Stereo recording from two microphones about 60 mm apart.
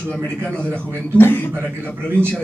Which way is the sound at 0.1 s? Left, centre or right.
Centre.